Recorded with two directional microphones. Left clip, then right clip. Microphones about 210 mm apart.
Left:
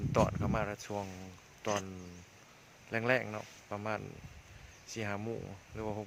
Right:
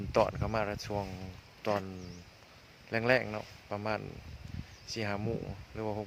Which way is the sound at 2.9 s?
10° right (ahead or behind).